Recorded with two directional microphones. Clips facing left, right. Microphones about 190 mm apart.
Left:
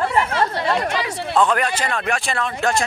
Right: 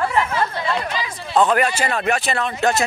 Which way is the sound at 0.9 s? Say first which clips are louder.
Left 4 dB; 70° left (ahead or behind).